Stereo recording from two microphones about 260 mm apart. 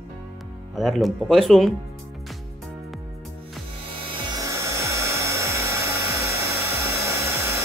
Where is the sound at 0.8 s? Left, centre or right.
Centre.